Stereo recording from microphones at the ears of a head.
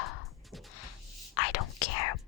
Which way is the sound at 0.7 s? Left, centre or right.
Left.